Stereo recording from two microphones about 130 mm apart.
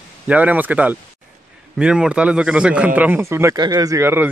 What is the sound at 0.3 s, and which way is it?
Speech, 10° right (ahead or behind).